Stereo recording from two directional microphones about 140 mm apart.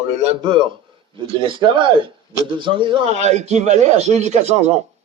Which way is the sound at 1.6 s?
35° right (ahead or behind).